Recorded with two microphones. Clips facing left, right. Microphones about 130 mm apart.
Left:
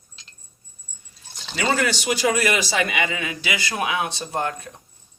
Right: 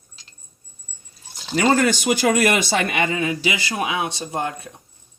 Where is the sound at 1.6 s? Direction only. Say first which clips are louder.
Right 5 dB; 45° right (ahead or behind).